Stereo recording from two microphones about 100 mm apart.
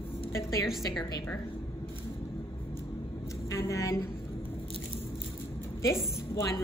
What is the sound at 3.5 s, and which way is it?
Speech, 30° left (ahead or behind).